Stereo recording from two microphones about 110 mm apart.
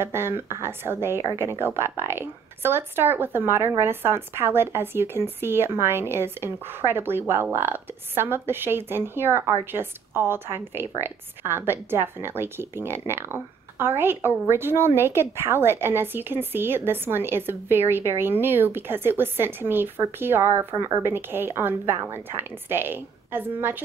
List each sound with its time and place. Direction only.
0.0 s a woman's voice: 20° right (ahead or behind)